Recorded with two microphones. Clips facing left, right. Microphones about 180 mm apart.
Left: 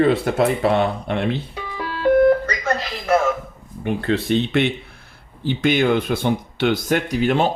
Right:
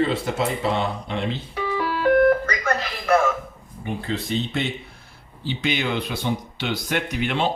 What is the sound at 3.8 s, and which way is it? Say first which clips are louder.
Speech: left 7 dB; 65° left (ahead or behind).